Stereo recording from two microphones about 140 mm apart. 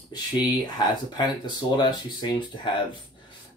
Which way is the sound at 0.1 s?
30° left (ahead or behind).